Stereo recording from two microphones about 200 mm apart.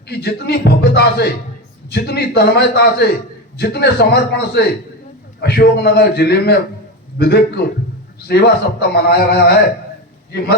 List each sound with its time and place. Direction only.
0.1 s a man's voice: 55° left (ahead or behind)